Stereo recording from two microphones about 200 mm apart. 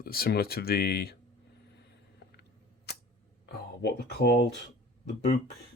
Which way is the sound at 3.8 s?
55° left (ahead or behind).